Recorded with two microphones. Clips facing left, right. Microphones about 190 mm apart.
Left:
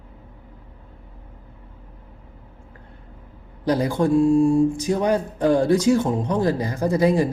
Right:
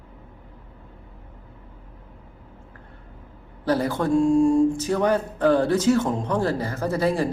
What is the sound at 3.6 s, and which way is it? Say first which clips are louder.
Speech: left 2 dB; 15° left (ahead or behind).